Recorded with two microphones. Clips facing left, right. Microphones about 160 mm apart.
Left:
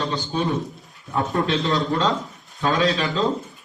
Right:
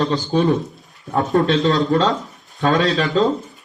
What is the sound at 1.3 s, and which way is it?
Speech, 45° right (ahead or behind).